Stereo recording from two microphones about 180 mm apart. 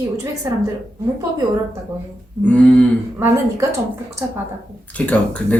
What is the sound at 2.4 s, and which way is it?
Speech, 5° left (ahead or behind).